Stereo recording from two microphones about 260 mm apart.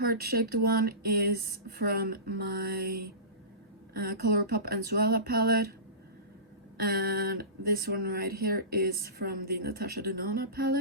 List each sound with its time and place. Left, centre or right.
0.0 s speech: right
3.9 s speech: right
6.7 s speech: right